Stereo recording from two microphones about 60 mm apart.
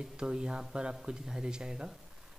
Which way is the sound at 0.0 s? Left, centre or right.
Centre.